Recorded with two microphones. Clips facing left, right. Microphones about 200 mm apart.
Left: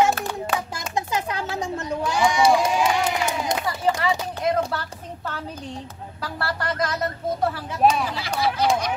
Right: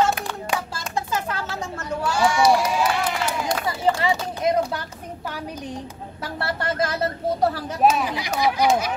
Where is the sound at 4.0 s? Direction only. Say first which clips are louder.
Right 1 dB; 20° right (ahead or behind).